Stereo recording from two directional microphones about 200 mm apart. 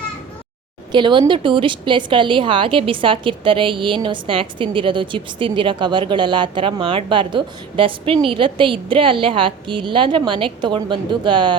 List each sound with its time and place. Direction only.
0.9 s a woman's voice: 25° right (ahead or behind)